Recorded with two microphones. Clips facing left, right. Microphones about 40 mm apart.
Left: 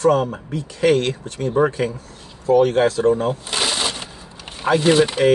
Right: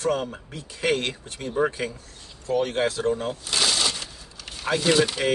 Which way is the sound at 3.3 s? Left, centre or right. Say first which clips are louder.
Left 3 dB; left.